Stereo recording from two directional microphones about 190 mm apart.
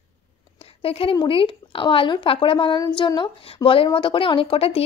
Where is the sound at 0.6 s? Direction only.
30° left (ahead or behind).